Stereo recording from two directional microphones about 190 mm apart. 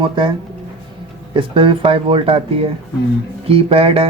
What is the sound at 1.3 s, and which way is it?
Speech, 25° right (ahead or behind).